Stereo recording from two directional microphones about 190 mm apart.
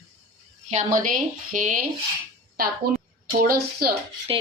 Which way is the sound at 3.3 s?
50° right (ahead or behind).